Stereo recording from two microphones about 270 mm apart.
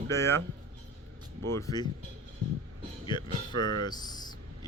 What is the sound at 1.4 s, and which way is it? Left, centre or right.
Speech, centre.